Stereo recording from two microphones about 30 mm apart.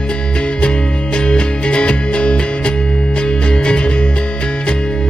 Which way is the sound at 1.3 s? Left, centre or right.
Left.